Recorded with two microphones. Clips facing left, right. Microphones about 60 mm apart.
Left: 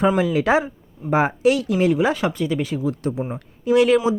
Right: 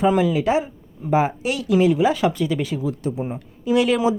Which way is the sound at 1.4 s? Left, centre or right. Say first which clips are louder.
Left 8 dB; left.